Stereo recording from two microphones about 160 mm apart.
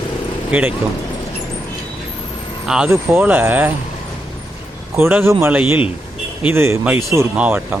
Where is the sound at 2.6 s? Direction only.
5° right (ahead or behind).